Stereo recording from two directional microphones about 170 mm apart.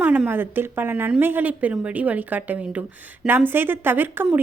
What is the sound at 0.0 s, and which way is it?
A woman's voice, 10° right (ahead or behind).